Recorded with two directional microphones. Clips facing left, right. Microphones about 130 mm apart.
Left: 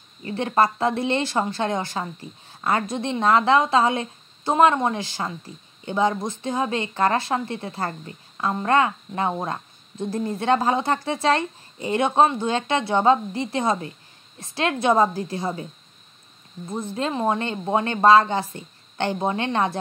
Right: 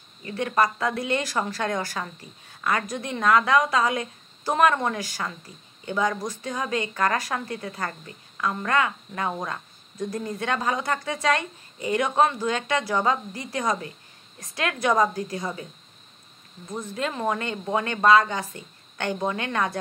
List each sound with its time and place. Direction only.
0.2 s a woman's voice: 30° left (ahead or behind)
16.7 s a woman's voice: 30° left (ahead or behind)